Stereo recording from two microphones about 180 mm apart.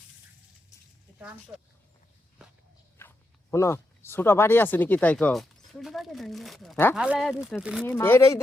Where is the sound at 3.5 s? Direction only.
15° left (ahead or behind); by 7.9 s 5° right (ahead or behind).